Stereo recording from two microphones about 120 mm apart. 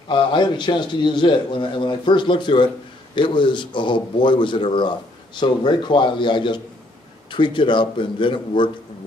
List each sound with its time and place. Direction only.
0.1 s a man's voice: 40° left (ahead or behind)